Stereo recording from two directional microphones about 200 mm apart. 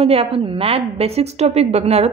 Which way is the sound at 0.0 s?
30° right (ahead or behind).